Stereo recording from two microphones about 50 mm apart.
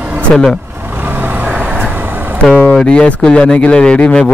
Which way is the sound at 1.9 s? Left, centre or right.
Right.